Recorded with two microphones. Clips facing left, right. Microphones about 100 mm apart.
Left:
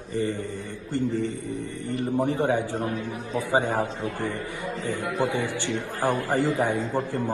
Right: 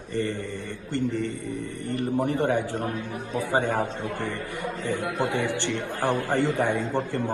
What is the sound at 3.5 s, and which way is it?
Speech, 20° left (ahead or behind).